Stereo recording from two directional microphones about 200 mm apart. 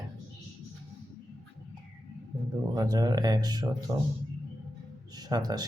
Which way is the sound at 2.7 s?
20° right (ahead or behind).